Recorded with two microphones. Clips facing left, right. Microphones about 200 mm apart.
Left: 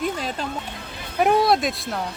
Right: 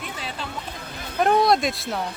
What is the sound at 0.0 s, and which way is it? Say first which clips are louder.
Music: left 8 dB; 40° left (ahead or behind).